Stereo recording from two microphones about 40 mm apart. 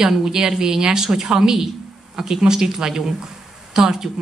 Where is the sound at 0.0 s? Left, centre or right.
Centre.